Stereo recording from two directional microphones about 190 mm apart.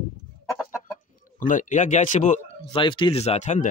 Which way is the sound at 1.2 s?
45° left (ahead or behind).